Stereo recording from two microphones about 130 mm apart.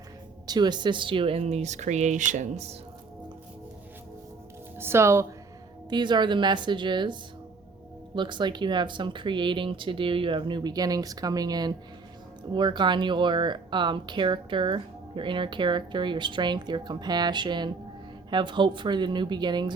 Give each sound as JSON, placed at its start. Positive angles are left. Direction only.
{"t": 0.4, "sound": "speech", "side_deg": -35}
{"t": 4.8, "sound": "speech", "side_deg": -20}
{"t": 5.9, "sound": "speech", "side_deg": -35}